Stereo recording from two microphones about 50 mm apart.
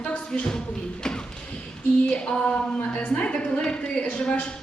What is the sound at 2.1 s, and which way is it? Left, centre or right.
A woman's voice, centre.